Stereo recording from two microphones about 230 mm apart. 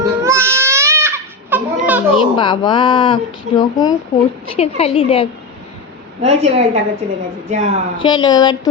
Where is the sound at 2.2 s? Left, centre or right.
Left.